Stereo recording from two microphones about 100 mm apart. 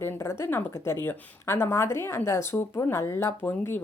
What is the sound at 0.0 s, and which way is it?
A woman's voice, 25° left (ahead or behind).